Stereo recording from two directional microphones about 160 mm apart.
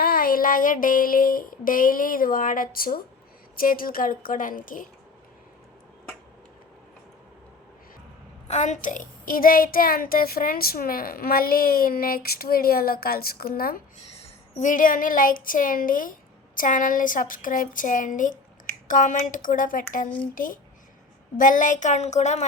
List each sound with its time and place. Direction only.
0.0 s a woman's voice: 65° left (ahead or behind)
8.4 s a woman's voice: 50° left (ahead or behind)
14.5 s a woman's voice: 55° left (ahead or behind)